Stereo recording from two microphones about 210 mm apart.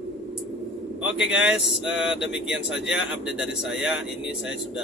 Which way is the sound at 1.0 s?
5° right (ahead or behind).